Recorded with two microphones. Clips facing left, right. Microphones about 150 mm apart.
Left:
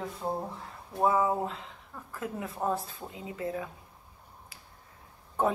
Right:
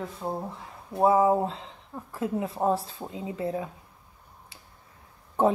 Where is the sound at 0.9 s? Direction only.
30° right (ahead or behind).